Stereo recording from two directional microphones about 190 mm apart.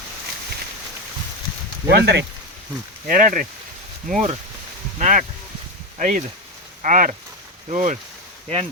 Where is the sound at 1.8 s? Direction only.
65° right (ahead or behind).